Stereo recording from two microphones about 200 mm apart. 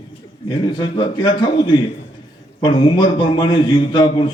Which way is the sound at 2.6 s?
20° left (ahead or behind).